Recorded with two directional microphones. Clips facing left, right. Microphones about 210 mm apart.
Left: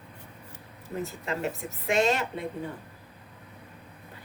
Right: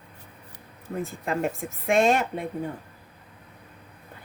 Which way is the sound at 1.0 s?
50° right (ahead or behind).